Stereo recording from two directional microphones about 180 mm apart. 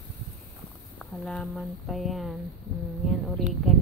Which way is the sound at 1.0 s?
5° left (ahead or behind).